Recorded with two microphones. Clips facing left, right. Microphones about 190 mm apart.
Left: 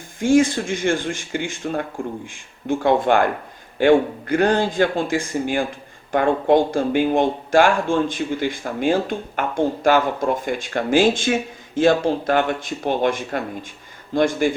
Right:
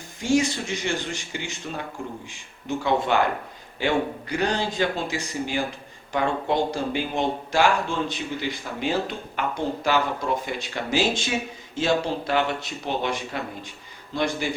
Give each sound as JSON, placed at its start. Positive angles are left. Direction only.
{"t": 0.2, "sound": "speech", "side_deg": 50}